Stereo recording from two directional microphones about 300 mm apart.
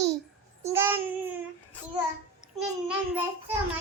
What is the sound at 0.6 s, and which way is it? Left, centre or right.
Babbling, centre.